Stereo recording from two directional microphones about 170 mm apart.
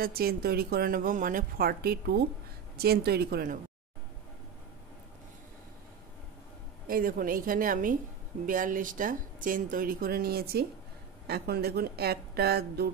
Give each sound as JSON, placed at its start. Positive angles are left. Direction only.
{"t": 0.0, "sound": "a woman's voice", "side_deg": -60}
{"t": 6.9, "sound": "a woman's voice", "side_deg": -55}